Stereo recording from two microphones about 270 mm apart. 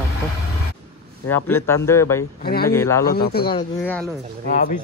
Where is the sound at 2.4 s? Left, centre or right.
Left.